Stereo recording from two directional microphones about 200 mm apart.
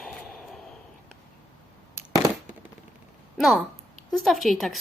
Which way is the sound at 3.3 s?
Centre (ahead or behind).